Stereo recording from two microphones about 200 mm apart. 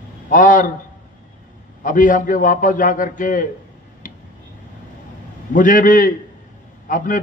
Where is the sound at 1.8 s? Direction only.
40° left (ahead or behind).